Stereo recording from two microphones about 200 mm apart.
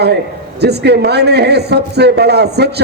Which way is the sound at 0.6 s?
55° right (ahead or behind).